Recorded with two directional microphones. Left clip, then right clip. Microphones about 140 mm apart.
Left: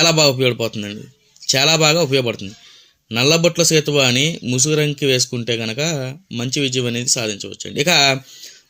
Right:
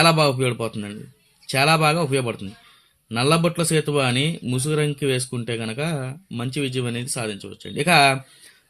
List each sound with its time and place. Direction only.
0.0 s speech: 30° left (ahead or behind)